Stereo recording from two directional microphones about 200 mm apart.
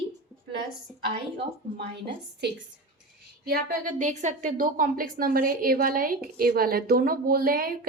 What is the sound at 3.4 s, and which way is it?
A woman's voice, 45° right (ahead or behind).